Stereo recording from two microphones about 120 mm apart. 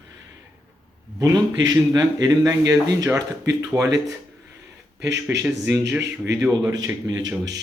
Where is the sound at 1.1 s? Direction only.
35° right (ahead or behind).